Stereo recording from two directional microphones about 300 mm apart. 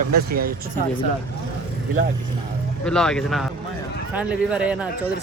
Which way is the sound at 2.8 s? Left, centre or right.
Centre.